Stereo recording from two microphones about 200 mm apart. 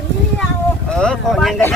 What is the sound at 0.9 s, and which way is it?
Speech, 5° left (ahead or behind).